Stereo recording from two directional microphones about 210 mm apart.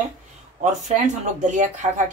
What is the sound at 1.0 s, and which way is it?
Speech, 35° right (ahead or behind).